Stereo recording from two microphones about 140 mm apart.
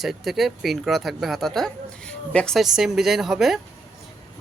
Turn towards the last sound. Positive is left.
turn(degrees=0)  # may be behind; listen again after turning